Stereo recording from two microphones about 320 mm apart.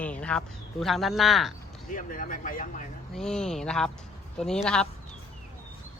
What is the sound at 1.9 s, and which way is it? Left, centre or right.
Speech, left.